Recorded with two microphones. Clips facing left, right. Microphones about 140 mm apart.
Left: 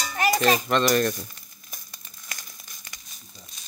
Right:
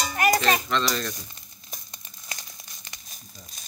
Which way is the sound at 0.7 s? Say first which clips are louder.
Left 6 dB; 50° left (ahead or behind).